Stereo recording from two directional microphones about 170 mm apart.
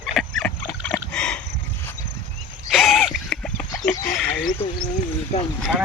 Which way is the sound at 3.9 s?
50° left (ahead or behind).